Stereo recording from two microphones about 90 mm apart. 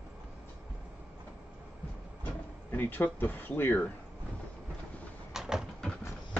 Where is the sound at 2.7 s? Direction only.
20° left (ahead or behind).